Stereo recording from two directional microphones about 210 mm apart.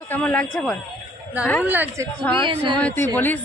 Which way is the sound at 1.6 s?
10° right (ahead or behind).